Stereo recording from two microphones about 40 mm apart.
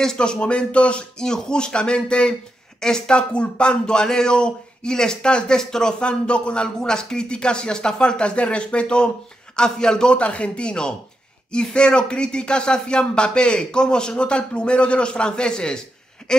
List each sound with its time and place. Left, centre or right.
0.0 s a man's voice: centre
10.1 s speech: left